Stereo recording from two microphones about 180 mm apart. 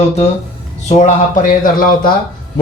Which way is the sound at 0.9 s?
40° left (ahead or behind).